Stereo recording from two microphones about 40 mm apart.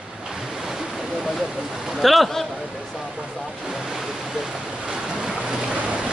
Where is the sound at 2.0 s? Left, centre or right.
Centre.